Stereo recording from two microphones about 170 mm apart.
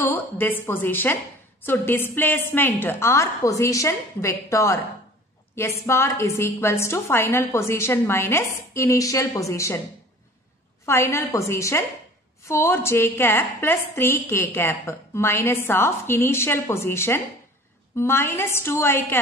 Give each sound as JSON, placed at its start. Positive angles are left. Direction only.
{"t": 0.0, "sound": "a woman's voice", "side_deg": 10}
{"t": 10.9, "sound": "a woman's voice", "side_deg": 15}